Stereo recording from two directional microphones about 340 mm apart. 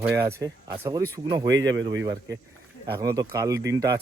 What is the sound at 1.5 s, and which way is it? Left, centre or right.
Speech, right.